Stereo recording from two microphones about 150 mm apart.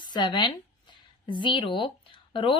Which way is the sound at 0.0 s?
30° left (ahead or behind).